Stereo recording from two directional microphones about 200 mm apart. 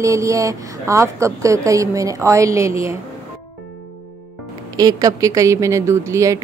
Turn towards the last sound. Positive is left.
turn(degrees=-15)  # may be behind; listen again after turning